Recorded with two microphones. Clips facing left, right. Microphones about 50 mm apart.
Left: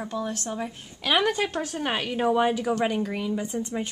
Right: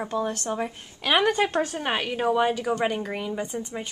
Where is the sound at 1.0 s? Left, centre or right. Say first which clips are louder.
Right 2 dB; centre.